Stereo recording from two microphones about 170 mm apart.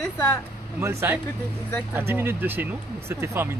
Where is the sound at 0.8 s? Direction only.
15° right (ahead or behind).